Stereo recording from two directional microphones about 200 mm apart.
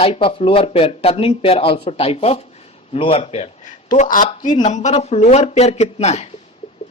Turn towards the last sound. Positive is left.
turn(degrees=35)  # may be behind; listen again after turning